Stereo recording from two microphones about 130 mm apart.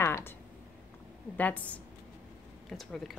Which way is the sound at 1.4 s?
10° left (ahead or behind).